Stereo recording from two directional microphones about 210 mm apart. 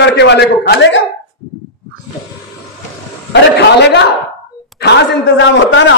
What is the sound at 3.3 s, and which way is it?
A man's voice, 55° left (ahead or behind).